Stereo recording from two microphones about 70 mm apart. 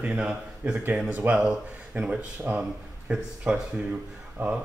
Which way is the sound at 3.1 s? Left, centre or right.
Centre.